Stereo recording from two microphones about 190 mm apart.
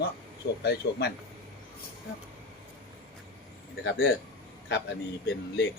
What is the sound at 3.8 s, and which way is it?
Speech, 70° left (ahead or behind).